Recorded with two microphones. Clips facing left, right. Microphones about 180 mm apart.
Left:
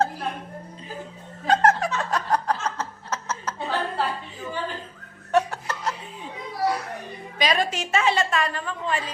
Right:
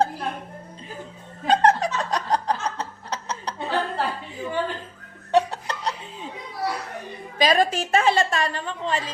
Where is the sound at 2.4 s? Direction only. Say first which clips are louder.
Even; 15° right (ahead or behind).